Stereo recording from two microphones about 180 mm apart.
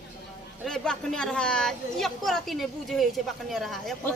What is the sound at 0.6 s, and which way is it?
Speech, 5° left (ahead or behind).